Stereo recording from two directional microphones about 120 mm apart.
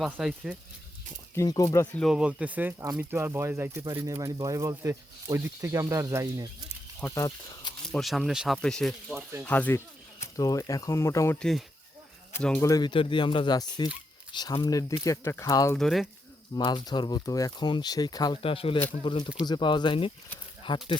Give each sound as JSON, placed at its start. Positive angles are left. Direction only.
{"t": 0.0, "sound": "speech", "side_deg": -5}
{"t": 1.4, "sound": "speech", "side_deg": 30}
{"t": 1.9, "sound": "speech", "side_deg": 5}
{"t": 2.1, "sound": "speech", "side_deg": -10}
{"t": 7.1, "sound": "speech", "side_deg": 35}
{"t": 7.9, "sound": "speech", "side_deg": 0}
{"t": 8.6, "sound": "speech", "side_deg": 5}
{"t": 9.4, "sound": "speech", "side_deg": 15}
{"t": 11.3, "sound": "speech", "side_deg": 5}
{"t": 12.6, "sound": "speech", "side_deg": 30}
{"t": 12.9, "sound": "speech", "side_deg": 45}
{"t": 15.8, "sound": "speech", "side_deg": 0}
{"t": 16.6, "sound": "speech", "side_deg": 35}
{"t": 18.4, "sound": "speech", "side_deg": 50}